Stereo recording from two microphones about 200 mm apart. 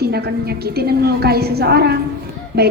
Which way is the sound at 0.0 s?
55° right (ahead or behind).